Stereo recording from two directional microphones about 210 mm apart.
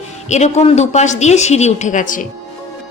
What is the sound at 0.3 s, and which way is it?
A woman's voice, 35° left (ahead or behind).